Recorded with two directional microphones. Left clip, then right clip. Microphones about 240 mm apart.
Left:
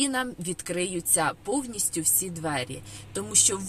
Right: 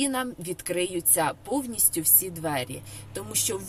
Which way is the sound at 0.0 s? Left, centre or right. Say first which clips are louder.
Left 1 dB; centre.